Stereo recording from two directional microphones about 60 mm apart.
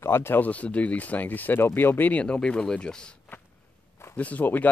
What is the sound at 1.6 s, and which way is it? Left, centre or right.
Speech, left.